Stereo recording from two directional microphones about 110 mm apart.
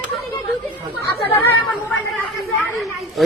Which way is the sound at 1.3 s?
20° left (ahead or behind).